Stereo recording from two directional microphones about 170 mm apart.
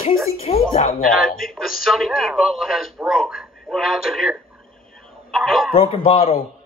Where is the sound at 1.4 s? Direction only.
Centre (ahead or behind).